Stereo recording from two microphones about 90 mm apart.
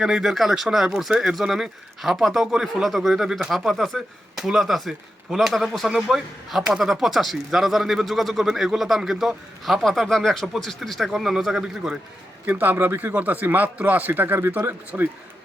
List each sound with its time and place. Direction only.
0.0 s speech: 5° right (ahead or behind)
12.5 s speech: 20° right (ahead or behind)